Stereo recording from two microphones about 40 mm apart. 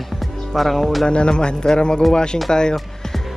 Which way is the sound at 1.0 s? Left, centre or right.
Left.